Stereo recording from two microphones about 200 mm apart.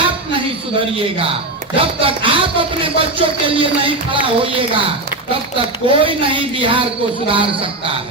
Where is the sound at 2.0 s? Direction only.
25° right (ahead or behind).